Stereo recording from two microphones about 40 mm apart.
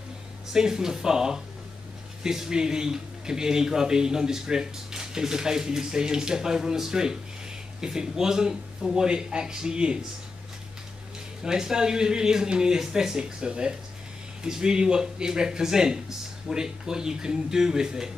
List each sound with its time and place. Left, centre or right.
0.5 s speech: centre
11.4 s speech: centre